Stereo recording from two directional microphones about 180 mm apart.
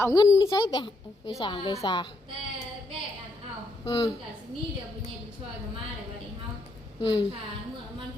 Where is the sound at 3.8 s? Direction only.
30° left (ahead or behind).